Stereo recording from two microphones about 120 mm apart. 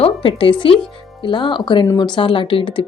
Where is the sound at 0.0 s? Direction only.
50° left (ahead or behind).